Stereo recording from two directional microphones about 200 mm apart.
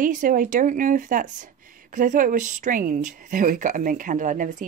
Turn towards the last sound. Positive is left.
turn(degrees=-40)  # may be behind; listen again after turning